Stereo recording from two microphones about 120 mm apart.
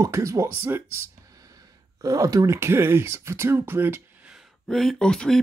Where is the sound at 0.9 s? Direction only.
30° right (ahead or behind); by 4.5 s 10° right (ahead or behind).